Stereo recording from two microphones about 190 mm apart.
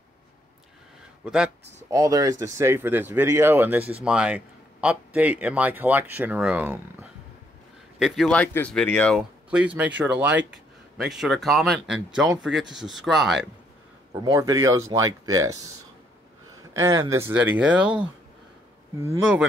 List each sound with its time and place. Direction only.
1.2 s speech: 5° right (ahead or behind)
1.9 s speech: 15° right (ahead or behind)
8.0 s speech: 5° left (ahead or behind)
9.5 s speech: 10° right (ahead or behind)
14.2 s speech: 15° right (ahead or behind)
16.7 s speech: 15° right (ahead or behind)
18.9 s speech: 10° right (ahead or behind)